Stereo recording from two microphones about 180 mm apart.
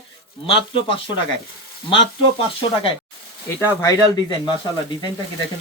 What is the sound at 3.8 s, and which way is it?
Speech, 20° left (ahead or behind).